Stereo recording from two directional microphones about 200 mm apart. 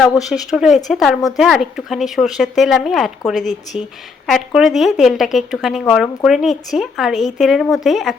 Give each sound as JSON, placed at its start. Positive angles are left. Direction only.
{"t": 0.2, "sound": "speech", "side_deg": 0}
{"t": 3.7, "sound": "speech", "side_deg": 25}
{"t": 4.3, "sound": "speech", "side_deg": 0}